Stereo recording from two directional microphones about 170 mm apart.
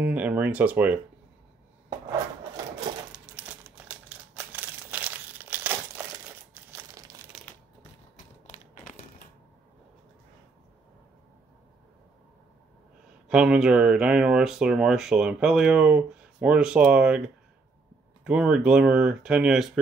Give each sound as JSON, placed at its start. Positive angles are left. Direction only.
{"t": 0.0, "sound": "speech", "side_deg": -10}
{"t": 3.3, "sound": "crumpling", "side_deg": -10}
{"t": 8.2, "sound": "a sound", "side_deg": 50}
{"t": 13.3, "sound": "speech", "side_deg": -5}
{"t": 18.2, "sound": "speech", "side_deg": -5}